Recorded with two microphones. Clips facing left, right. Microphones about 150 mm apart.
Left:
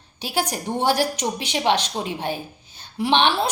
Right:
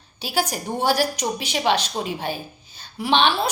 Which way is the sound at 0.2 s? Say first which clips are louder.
Even; 20° left (ahead or behind).